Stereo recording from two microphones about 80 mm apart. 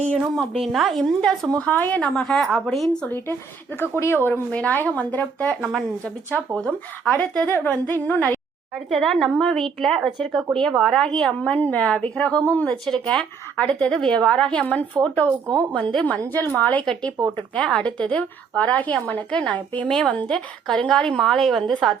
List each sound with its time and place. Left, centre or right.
0.5 s a woman's voice: centre; by 2.0 s left
2.0 s a woman's voice: centre
3.8 s speech: left
6.6 s a woman's voice: centre
7.4 s speech: left
8.9 s a woman's voice: centre
12.8 s a woman's voice: centre
16.8 s a woman's voice: centre